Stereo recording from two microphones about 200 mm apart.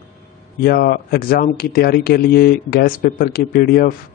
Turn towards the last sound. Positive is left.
turn(degrees=50)  # may be behind; listen again after turning